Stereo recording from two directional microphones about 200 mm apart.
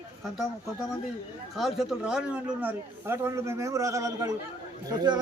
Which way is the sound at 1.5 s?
Centre (ahead or behind).